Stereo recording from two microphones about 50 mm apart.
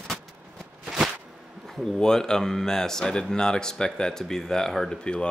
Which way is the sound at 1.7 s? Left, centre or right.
Centre.